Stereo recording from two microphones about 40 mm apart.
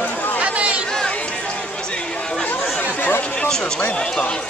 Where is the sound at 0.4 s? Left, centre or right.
Right.